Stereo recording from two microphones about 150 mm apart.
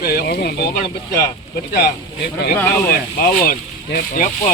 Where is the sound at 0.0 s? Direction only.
90° left.